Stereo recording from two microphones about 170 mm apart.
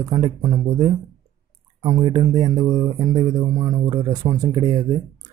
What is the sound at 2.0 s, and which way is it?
Music, 25° right (ahead or behind).